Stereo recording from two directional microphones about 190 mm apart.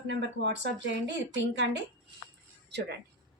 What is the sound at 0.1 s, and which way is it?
A woman's voice, 65° right (ahead or behind).